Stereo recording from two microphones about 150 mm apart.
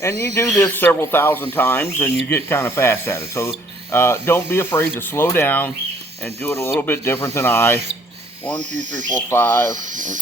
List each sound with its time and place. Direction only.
0.3 s speech: 20° left (ahead or behind)
8.7 s speech: 55° right (ahead or behind)
9.3 s speech: 15° left (ahead or behind)
9.7 s speech: 60° right (ahead or behind)